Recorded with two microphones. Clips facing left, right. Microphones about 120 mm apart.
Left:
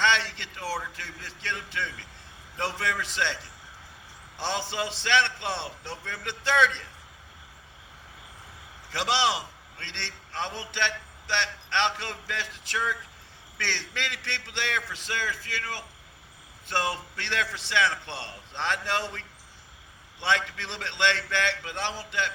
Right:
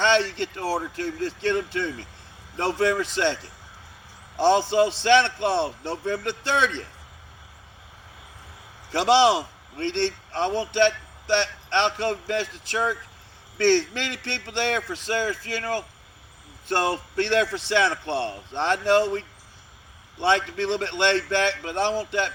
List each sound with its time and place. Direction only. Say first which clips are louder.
0.0 s a man's voice: right 5 dB; 45° right (ahead or behind)
4.4 s a man's voice: right 12 dB; 45° right (ahead or behind)
9.0 s a man's voice: right 8 dB; 50° right (ahead or behind)
20.2 s a man's voice: right 7 dB; 40° right (ahead or behind)